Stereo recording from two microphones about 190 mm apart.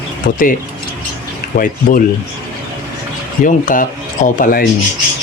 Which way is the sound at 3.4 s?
45° left (ahead or behind).